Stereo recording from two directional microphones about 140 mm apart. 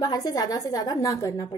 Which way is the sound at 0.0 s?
25° left (ahead or behind).